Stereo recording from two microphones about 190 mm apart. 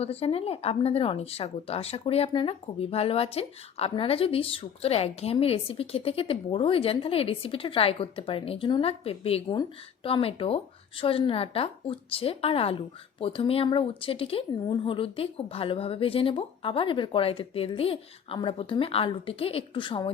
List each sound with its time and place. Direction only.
0.0 s speech: 30° left (ahead or behind)